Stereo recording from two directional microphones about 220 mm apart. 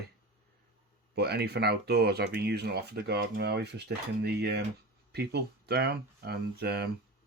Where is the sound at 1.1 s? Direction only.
45° right (ahead or behind).